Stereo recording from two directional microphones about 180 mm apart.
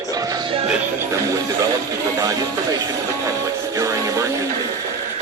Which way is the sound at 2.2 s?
20° right (ahead or behind).